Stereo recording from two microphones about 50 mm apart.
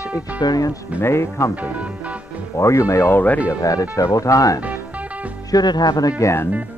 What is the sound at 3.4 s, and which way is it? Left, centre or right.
Speech, left.